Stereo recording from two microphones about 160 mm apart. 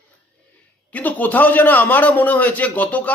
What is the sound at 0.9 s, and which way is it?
A man's voice, 10° left (ahead or behind).